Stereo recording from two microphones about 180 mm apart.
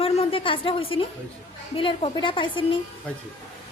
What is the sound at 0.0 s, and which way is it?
A woman's voice, 30° left (ahead or behind).